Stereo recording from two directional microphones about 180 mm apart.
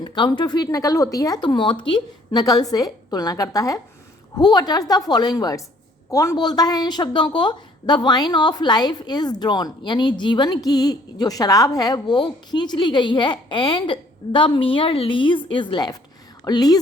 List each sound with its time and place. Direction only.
0.0 s a woman's voice: 25° left (ahead or behind)